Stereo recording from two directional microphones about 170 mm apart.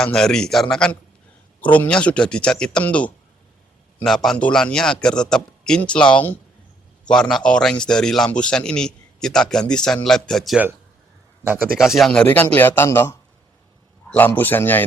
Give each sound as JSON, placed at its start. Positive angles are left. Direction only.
{"t": 0.0, "sound": "a man's voice", "side_deg": 5}
{"t": 11.8, "sound": "speech", "side_deg": 0}